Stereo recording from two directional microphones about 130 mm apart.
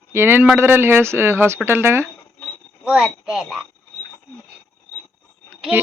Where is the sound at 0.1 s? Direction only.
15° right (ahead or behind).